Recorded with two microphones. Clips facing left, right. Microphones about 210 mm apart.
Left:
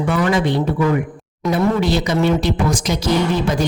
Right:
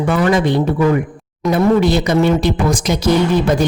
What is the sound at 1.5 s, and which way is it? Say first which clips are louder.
A woman's voice: right 4 dB; 55° right (ahead or behind).